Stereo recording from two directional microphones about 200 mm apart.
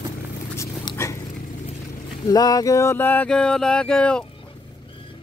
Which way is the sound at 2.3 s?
20° left (ahead or behind).